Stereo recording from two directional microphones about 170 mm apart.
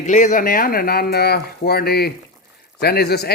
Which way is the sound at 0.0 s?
45° left (ahead or behind).